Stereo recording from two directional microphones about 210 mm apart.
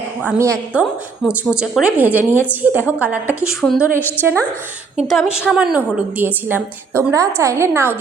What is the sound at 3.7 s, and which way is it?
Speech, 5° right (ahead or behind).